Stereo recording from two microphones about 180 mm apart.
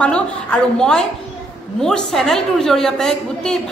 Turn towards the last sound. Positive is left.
turn(degrees=5)  # may be behind; listen again after turning